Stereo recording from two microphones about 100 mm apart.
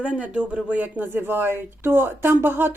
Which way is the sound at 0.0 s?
10° right (ahead or behind).